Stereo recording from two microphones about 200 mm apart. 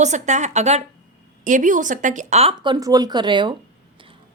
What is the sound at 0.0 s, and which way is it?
A woman's voice, 35° right (ahead or behind).